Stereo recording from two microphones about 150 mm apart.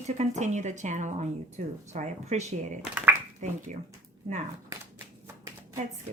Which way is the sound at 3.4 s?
50° right (ahead or behind).